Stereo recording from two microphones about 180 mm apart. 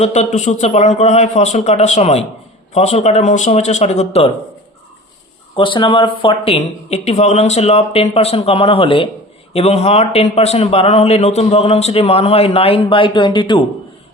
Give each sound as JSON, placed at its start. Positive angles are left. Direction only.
{"t": 0.0, "sound": "a man's voice", "side_deg": 40}
{"t": 5.5, "sound": "a man's voice", "side_deg": 30}